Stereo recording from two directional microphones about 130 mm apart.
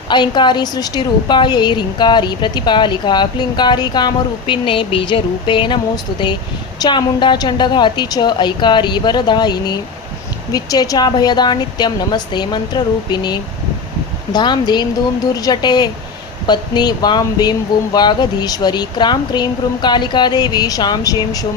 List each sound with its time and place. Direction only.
0.1 s a woman's voice: 35° left (ahead or behind)